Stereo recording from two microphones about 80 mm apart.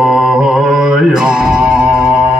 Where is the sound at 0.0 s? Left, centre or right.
Centre.